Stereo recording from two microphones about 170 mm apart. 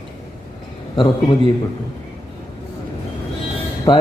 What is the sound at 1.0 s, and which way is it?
Speech, 30° left (ahead or behind).